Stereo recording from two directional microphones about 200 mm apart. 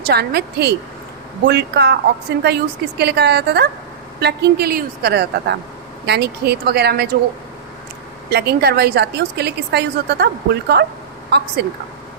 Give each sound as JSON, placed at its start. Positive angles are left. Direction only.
{"t": 0.0, "sound": "a woman's voice", "side_deg": -50}
{"t": 8.3, "sound": "a woman's voice", "side_deg": -55}